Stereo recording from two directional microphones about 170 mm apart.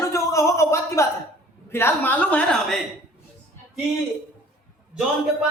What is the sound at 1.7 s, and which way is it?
A woman's voice, 10° left (ahead or behind).